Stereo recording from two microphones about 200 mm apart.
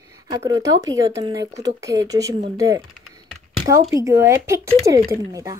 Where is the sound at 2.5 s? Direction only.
15° right (ahead or behind).